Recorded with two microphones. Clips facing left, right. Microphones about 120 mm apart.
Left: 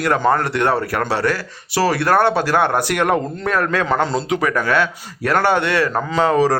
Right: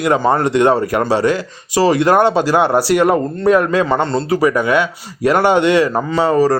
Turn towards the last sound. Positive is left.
turn(degrees=0)  # may be behind; listen again after turning